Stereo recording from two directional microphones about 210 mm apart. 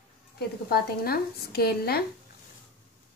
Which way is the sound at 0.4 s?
45° left (ahead or behind).